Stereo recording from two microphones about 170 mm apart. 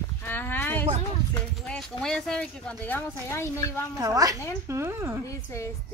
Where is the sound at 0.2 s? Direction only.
10° left (ahead or behind).